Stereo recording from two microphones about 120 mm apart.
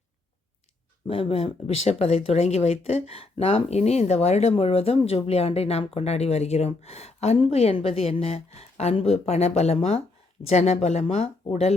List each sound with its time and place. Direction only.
1.0 s speech: 55° left (ahead or behind)